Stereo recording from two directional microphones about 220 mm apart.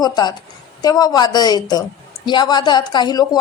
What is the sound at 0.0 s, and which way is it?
A woman's voice, 20° left (ahead or behind).